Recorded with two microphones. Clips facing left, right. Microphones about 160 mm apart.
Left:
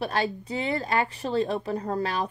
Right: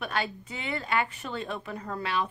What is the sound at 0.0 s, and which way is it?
A woman's voice, 35° left (ahead or behind).